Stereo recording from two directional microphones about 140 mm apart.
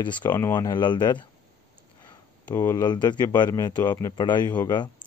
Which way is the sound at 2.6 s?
25° left (ahead or behind).